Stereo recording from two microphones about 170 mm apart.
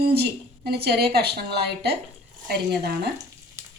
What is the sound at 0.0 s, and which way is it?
Speech, 65° right (ahead or behind).